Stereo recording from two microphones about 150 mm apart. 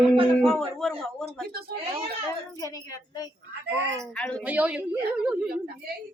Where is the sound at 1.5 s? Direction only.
90° right.